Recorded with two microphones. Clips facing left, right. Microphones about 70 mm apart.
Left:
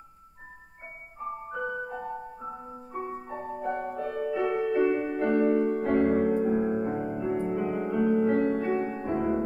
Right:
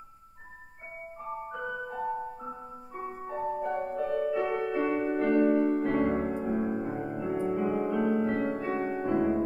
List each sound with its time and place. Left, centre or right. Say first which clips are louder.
1.5 s music: left 5 dB; centre
3.3 s music: right 2 dB; centre
8.7 s music: left 1 dB; centre
9.0 s music: right 1 dB; centre